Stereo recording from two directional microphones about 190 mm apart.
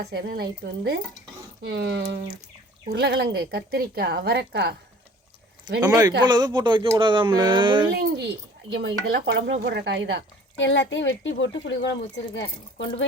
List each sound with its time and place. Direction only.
0.0 s a woman's voice: 60° right (ahead or behind)
5.8 s speech: 20° right (ahead or behind)
7.9 s a woman's voice: 65° right (ahead or behind)
8.7 s speech: 75° right (ahead or behind)
10.6 s speech: 75° left (ahead or behind)